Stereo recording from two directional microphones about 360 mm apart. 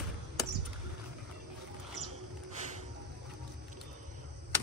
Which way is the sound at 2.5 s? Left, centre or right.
Centre.